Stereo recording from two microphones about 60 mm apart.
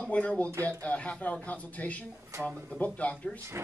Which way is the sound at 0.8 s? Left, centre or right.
Left.